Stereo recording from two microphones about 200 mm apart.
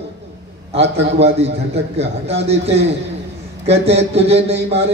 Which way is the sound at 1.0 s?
30° right (ahead or behind).